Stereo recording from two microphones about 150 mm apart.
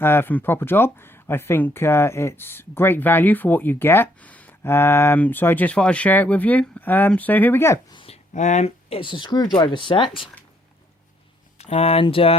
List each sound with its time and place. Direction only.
0.0 s speech: 15° left (ahead or behind)
7.9 s a sound: 40° left (ahead or behind)
8.3 s speech: 55° left (ahead or behind); by 10.2 s 35° left (ahead or behind)
11.5 s speech: 45° left (ahead or behind)